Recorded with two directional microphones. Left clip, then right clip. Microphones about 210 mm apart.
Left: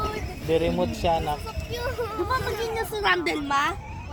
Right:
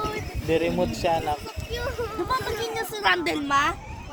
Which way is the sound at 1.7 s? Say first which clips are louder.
Even; 10° left (ahead or behind).